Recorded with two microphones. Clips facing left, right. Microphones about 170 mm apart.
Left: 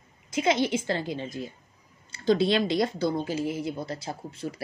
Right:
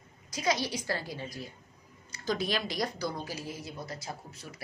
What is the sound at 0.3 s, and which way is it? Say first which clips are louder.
Speech: left 7 dB; 25° left (ahead or behind).